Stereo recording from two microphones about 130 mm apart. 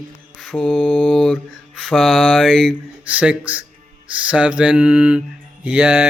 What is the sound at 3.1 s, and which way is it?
Music, 10° right (ahead or behind).